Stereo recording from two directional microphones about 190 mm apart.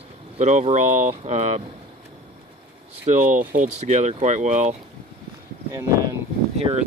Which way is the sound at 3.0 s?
45° right (ahead or behind).